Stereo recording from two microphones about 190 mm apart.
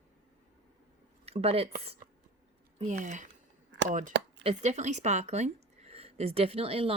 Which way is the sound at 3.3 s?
65° right (ahead or behind).